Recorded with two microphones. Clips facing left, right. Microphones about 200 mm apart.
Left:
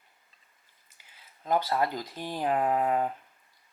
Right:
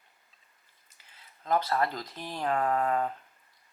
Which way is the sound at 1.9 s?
5° left (ahead or behind).